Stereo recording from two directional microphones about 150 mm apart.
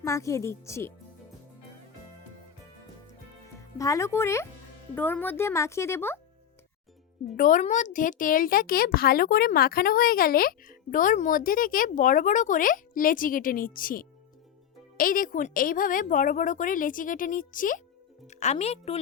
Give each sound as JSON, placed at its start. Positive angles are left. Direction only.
{"t": 0.0, "sound": "speech", "side_deg": 20}
{"t": 3.8, "sound": "speech", "side_deg": 20}
{"t": 7.3, "sound": "speech", "side_deg": 60}
{"t": 18.3, "sound": "speech", "side_deg": 50}